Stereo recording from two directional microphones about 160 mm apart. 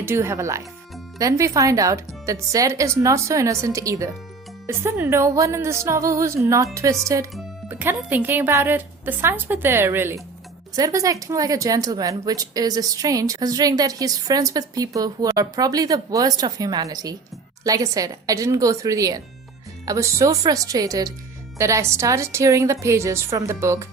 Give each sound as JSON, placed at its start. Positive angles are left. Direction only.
{"t": 0.0, "sound": "a woman's voice", "side_deg": -15}